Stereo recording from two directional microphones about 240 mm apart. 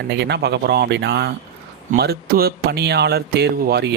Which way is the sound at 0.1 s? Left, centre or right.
Right.